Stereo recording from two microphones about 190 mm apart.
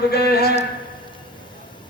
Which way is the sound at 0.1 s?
55° left (ahead or behind).